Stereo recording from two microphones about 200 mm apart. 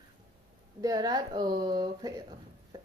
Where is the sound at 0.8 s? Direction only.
20° right (ahead or behind).